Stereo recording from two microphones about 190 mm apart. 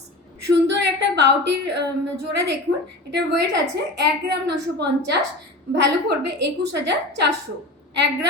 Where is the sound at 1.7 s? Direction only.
65° right (ahead or behind).